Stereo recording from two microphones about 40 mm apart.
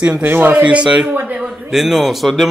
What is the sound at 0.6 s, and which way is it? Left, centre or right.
Speech, right.